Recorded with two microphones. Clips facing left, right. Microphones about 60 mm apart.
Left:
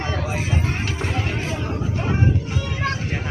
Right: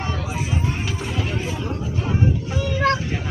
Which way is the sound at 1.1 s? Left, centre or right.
Left.